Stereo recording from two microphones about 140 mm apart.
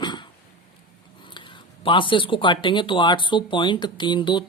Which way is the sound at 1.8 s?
35° left (ahead or behind).